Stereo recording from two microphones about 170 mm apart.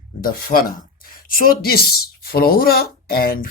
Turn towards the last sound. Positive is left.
turn(degrees=60)  # may be behind; listen again after turning